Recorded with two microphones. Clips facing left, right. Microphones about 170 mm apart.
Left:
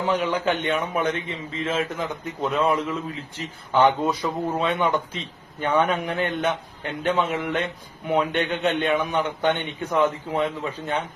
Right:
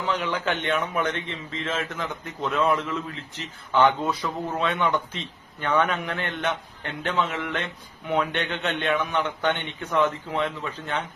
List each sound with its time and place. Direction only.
0.2 s a man's voice: 10° left (ahead or behind)
2.6 s a man's voice: 35° left (ahead or behind)
2.8 s a man's voice: 10° left (ahead or behind)